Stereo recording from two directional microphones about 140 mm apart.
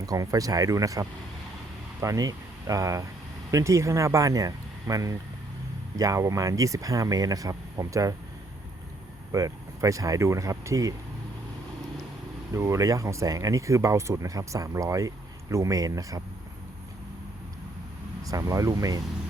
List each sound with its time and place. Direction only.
0.0 s speech: 25° right (ahead or behind)
9.3 s speech: 25° right (ahead or behind)
12.5 s speech: 20° right (ahead or behind)
18.2 s speech: 25° right (ahead or behind)